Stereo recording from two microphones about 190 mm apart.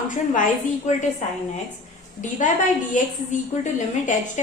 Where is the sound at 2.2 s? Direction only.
40° left (ahead or behind).